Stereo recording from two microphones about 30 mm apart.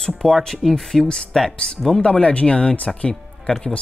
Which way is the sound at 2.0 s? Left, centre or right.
Left.